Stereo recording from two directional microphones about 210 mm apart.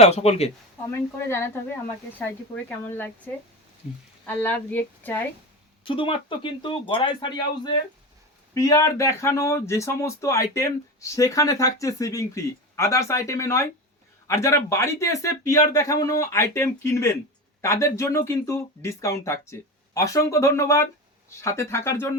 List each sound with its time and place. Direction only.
0.0 s speech: 30° left (ahead or behind)
1.3 s speech: 10° left (ahead or behind)
5.8 s speech: 25° left (ahead or behind)